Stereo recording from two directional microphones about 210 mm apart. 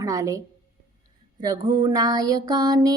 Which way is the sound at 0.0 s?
15° right (ahead or behind).